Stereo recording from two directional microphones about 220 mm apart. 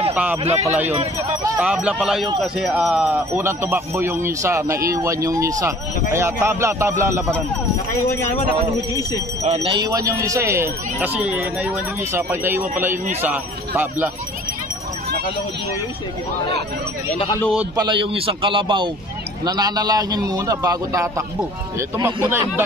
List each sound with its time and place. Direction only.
0.1 s speech: 5° right (ahead or behind)
0.4 s a man's voice: 30° right (ahead or behind)
0.7 s a man's voice: 10° right (ahead or behind)
9.4 s a man's voice: 25° right (ahead or behind); by 12.6 s 10° right (ahead or behind)
12.9 s a man's voice: 35° right (ahead or behind)
13.2 s a man's voice: 10° right (ahead or behind)
17.7 s a man's voice: 20° right (ahead or behind)